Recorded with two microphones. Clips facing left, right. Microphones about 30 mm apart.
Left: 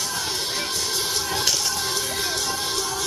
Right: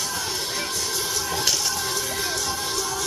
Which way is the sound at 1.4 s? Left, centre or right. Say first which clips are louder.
Right 1 dB; centre.